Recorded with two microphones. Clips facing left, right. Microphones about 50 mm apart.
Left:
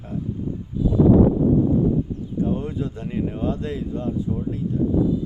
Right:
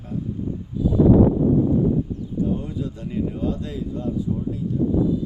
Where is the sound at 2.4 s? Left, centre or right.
Left.